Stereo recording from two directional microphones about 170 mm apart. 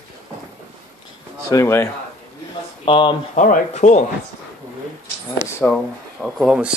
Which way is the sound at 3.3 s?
50° left (ahead or behind).